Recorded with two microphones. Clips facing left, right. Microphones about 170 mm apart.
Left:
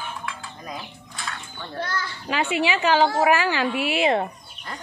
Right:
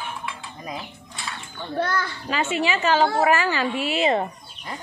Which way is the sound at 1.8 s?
55° right (ahead or behind).